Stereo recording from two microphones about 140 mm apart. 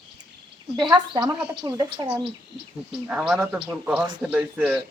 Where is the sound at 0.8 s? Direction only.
30° right (ahead or behind).